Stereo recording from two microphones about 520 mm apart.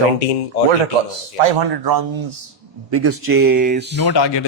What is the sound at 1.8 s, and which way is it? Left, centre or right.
Speech, right.